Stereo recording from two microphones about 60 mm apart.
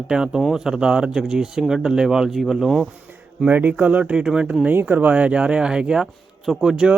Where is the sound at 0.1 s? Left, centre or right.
Centre.